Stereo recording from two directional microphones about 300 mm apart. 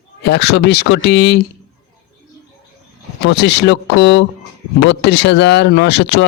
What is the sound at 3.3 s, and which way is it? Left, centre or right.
Speech, left.